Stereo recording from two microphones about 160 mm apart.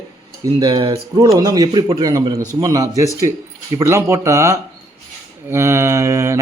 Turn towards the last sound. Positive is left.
turn(degrees=-20)  # may be behind; listen again after turning